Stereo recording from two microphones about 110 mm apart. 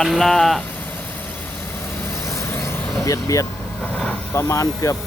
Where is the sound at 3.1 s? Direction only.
30° left (ahead or behind).